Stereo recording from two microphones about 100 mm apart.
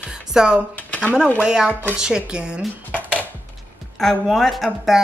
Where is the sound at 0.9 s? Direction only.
15° left (ahead or behind).